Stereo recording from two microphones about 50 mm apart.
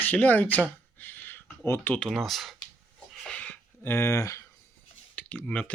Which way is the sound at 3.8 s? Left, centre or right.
Left.